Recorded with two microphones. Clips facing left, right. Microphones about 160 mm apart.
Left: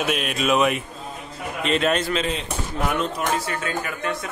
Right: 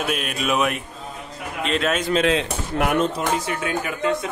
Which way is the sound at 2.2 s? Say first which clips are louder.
Right 6 dB; 90° right.